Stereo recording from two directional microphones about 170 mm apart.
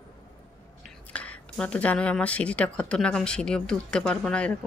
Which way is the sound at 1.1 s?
5° left (ahead or behind).